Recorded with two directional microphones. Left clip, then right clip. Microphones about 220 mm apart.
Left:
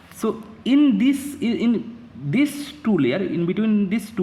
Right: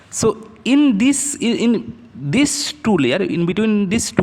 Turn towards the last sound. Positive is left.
turn(degrees=-40)  # may be behind; listen again after turning